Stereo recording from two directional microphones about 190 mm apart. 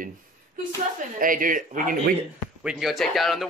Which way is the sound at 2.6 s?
Centre (ahead or behind).